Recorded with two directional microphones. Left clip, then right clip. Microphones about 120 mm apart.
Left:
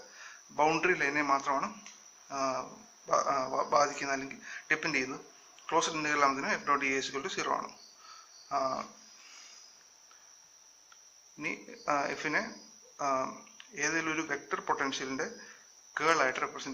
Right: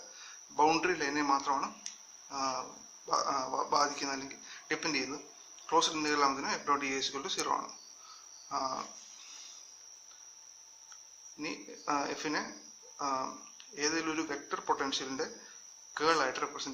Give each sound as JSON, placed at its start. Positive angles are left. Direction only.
{"t": 0.5, "sound": "a man's voice", "side_deg": -25}
{"t": 11.3, "sound": "a man's voice", "side_deg": -25}